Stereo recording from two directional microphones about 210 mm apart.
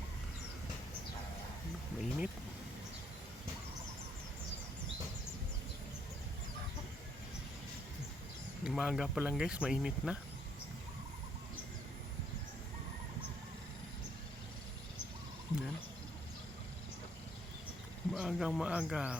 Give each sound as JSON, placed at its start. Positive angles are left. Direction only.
{"t": 2.0, "sound": "a sound", "side_deg": -5}
{"t": 8.6, "sound": "speech", "side_deg": -5}
{"t": 18.1, "sound": "speech", "side_deg": 0}